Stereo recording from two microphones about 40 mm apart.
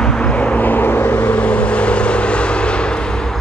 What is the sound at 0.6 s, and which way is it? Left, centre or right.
Vehicle, left.